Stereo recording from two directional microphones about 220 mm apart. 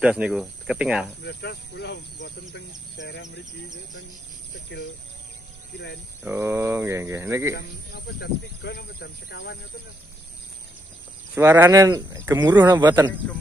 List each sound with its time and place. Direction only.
0.0 s speech: 5° right (ahead or behind)
1.2 s speech: 50° left (ahead or behind)
6.3 s speech: 10° right (ahead or behind)
8.2 s speech: 45° left (ahead or behind)
11.3 s speech: 10° right (ahead or behind)